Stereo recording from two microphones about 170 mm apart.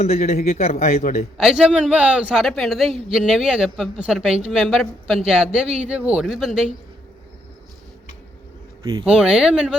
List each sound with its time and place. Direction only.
0.2 s speech: 55° left (ahead or behind)
0.5 s speech: 40° left (ahead or behind)
1.4 s a man's voice: 5° right (ahead or behind)
8.8 s speech: 25° right (ahead or behind)
9.0 s a man's voice: 5° right (ahead or behind)